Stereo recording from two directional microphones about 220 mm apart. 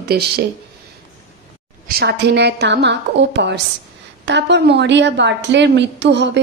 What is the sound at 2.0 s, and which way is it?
A woman's voice, 50° right (ahead or behind).